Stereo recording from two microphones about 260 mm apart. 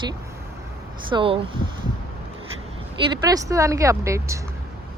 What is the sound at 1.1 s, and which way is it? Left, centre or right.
Speech, centre.